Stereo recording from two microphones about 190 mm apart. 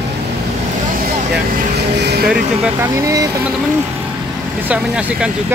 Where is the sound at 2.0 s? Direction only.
55° right (ahead or behind).